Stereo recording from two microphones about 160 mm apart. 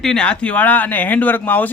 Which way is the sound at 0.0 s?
5° left (ahead or behind).